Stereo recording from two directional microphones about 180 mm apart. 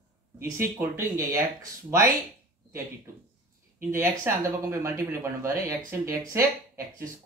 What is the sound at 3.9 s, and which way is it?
Speech, 15° right (ahead or behind).